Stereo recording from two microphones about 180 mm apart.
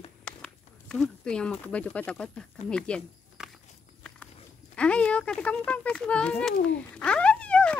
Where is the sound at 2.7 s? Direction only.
5° left (ahead or behind).